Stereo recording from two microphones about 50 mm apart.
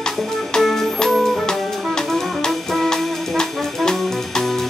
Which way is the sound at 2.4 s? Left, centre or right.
Centre.